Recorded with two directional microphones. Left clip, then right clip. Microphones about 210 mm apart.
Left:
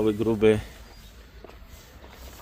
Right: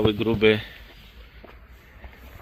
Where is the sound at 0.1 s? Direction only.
5° left (ahead or behind).